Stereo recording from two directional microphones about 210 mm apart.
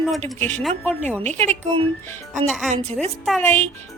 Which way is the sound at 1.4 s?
25° right (ahead or behind).